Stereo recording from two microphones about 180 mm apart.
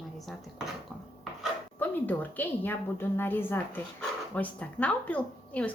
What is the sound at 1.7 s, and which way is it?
A woman's voice, 10° left (ahead or behind).